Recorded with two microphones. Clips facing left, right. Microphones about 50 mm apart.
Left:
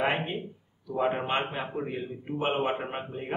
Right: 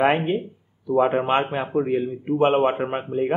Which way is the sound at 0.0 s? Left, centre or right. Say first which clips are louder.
Right 9 dB; centre.